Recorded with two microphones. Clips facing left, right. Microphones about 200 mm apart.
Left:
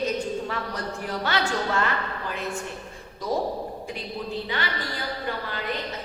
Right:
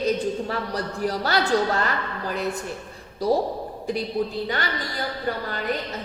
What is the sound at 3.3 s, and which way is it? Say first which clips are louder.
Speech: right 5 dB; 35° right (ahead or behind).